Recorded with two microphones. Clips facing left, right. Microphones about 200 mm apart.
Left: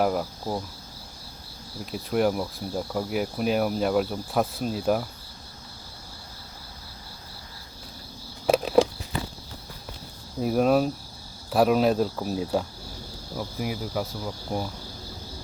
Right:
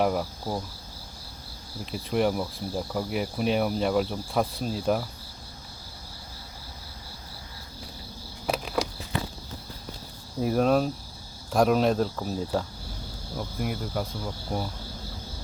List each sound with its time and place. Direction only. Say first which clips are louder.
0.0 s speech: left 1 dB; centre (ahead or behind)
1.8 s speech: left 1 dB; centre (ahead or behind)
8.4 s a sound: left 9 dB; 30° left (ahead or behind)
10.4 s speech: left 1 dB; 5° left (ahead or behind)